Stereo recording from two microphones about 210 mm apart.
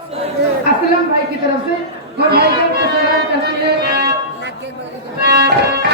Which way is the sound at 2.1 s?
50° right (ahead or behind).